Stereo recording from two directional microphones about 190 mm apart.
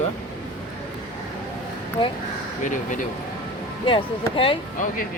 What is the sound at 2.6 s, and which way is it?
Speech, 40° left (ahead or behind).